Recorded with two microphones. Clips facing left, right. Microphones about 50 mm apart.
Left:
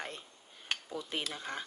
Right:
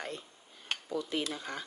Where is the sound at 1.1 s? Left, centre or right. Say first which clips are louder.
Right 3 dB; left.